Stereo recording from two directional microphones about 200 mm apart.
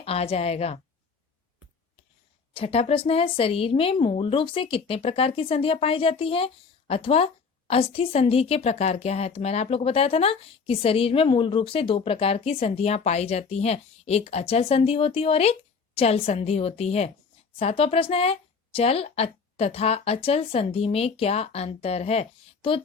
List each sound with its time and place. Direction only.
0.0 s a woman's voice: 30° left (ahead or behind)
2.5 s a woman's voice: 30° left (ahead or behind)